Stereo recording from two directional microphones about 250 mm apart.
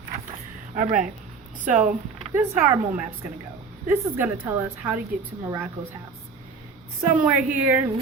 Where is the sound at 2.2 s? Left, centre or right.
Centre.